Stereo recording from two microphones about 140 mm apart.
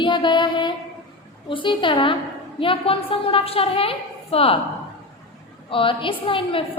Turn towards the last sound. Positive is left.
turn(degrees=40)  # may be behind; listen again after turning